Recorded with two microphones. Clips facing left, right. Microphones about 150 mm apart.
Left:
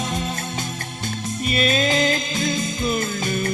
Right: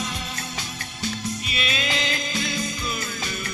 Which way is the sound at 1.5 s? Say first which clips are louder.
Left 11 dB; 45° left (ahead or behind).